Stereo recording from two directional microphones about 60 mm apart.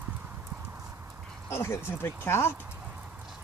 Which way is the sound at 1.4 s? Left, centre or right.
Left.